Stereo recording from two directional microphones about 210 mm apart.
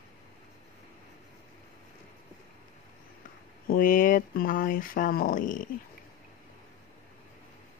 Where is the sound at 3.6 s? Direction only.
40° left (ahead or behind).